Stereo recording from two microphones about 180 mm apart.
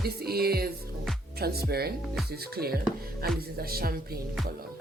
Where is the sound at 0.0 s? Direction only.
60° right (ahead or behind).